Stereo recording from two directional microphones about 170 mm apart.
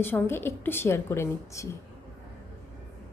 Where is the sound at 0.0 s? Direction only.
15° left (ahead or behind).